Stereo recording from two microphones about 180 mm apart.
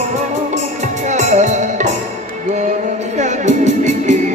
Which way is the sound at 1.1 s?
40° right (ahead or behind).